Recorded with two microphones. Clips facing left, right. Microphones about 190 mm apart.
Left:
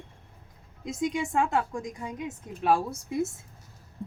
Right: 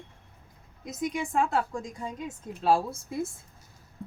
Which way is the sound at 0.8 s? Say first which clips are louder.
Left 2 dB; 25° left (ahead or behind).